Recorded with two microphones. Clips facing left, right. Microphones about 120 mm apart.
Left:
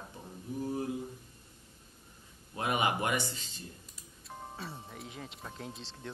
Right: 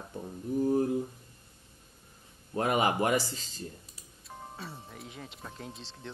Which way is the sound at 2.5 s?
35° right (ahead or behind).